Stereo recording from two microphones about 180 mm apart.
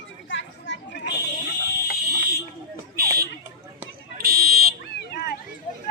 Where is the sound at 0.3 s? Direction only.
85° left.